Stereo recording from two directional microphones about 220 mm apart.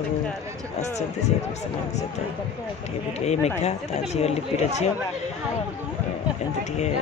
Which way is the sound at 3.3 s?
30° left (ahead or behind).